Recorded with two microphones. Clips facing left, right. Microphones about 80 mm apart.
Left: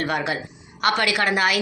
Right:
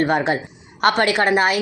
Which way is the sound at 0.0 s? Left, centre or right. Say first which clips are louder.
Right 6 dB; right.